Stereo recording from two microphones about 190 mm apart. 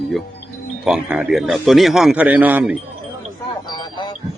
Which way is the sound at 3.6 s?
20° left (ahead or behind).